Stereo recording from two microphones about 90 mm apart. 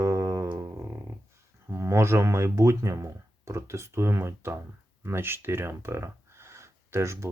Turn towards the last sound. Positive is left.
turn(degrees=-30)  # may be behind; listen again after turning